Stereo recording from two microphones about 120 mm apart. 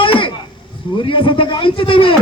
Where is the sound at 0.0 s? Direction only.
45° left (ahead or behind).